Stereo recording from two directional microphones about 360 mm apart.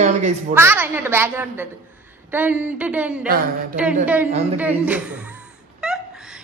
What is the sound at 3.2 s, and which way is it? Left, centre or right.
Speech, right.